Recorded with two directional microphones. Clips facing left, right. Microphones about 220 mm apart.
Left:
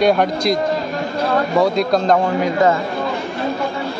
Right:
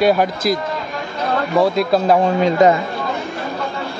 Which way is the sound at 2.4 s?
20° right (ahead or behind).